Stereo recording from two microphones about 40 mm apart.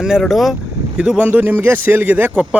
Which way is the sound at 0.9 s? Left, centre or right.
Right.